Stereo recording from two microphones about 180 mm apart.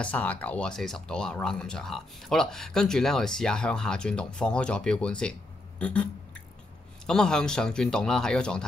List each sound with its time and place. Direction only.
0.0 s speech: 10° left (ahead or behind)
5.8 s a sound: 5° left (ahead or behind)
7.1 s speech: 5° left (ahead or behind)